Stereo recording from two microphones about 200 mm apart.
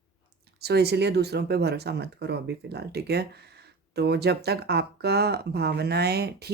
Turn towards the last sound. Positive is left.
turn(degrees=-55)  # may be behind; listen again after turning